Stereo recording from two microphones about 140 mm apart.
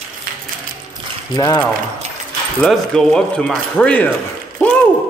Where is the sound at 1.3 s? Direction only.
30° left (ahead or behind).